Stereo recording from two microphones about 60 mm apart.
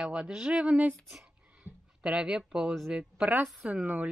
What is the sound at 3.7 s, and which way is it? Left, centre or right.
Speech, right.